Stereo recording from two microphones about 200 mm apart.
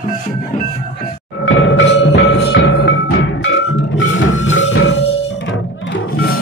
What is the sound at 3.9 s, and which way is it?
Music, 70° left (ahead or behind).